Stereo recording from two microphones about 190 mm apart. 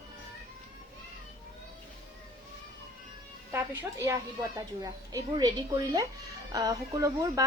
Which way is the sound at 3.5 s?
10° right (ahead or behind).